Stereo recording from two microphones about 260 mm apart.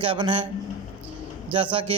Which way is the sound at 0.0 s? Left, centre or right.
Centre.